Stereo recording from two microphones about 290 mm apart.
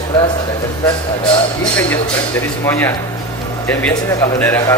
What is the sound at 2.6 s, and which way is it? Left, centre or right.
Speech, centre.